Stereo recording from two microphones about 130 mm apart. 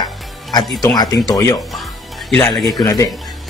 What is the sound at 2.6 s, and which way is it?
Speech, 30° left (ahead or behind).